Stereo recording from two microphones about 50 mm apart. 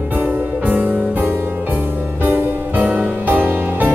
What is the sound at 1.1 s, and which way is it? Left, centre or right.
Music, right.